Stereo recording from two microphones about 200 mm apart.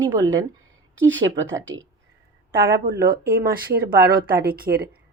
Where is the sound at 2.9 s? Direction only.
50° right (ahead or behind).